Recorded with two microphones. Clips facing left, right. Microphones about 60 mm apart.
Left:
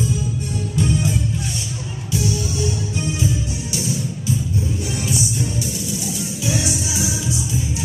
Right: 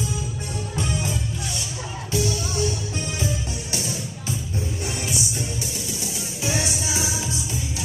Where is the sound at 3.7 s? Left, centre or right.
Right.